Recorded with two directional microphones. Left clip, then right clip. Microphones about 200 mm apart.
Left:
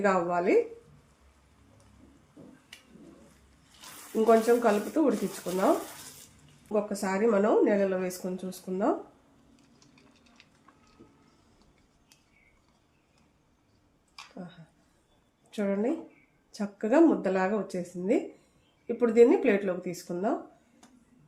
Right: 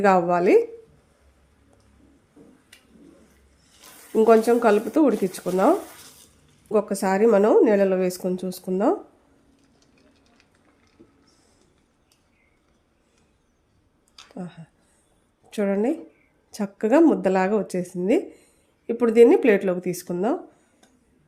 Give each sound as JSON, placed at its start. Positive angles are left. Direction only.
{"t": 0.0, "sound": "speech", "side_deg": -55}
{"t": 4.1, "sound": "a woman's voice", "side_deg": -55}
{"t": 6.7, "sound": "a woman's voice", "side_deg": -55}
{"t": 15.4, "sound": "a woman's voice", "side_deg": -55}